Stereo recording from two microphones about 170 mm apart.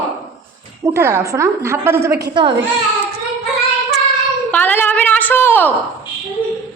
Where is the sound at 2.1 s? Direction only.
70° right (ahead or behind).